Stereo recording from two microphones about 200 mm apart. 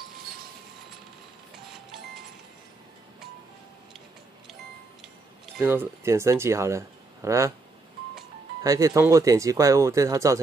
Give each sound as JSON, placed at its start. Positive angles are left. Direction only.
{"t": 5.6, "sound": "speech", "side_deg": -10}
{"t": 8.6, "sound": "speech", "side_deg": -15}